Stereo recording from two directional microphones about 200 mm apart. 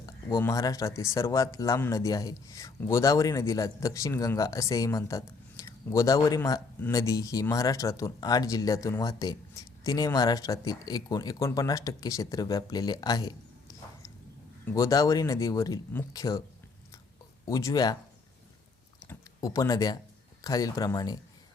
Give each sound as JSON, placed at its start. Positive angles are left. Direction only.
{"t": 0.0, "sound": "speech", "side_deg": 15}
{"t": 14.6, "sound": "speech", "side_deg": 10}
{"t": 17.4, "sound": "speech", "side_deg": 15}
{"t": 19.0, "sound": "speech", "side_deg": 15}